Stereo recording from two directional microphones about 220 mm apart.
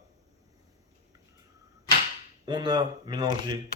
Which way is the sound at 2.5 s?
20° right (ahead or behind).